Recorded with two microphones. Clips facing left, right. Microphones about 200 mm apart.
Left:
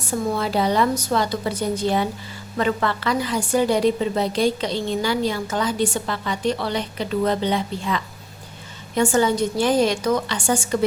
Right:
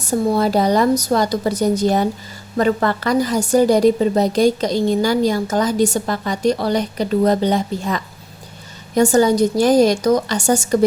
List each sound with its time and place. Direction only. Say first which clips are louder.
0.0 s a woman's voice: right 6 dB; 40° right (ahead or behind)